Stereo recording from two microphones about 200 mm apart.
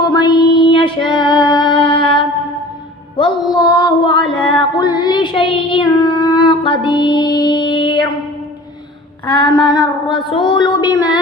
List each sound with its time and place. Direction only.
0.1 s a sound: 20° left (ahead or behind)
0.7 s female singing: 25° left (ahead or behind)
3.2 s music: 25° left (ahead or behind)
9.2 s female singing: 25° left (ahead or behind)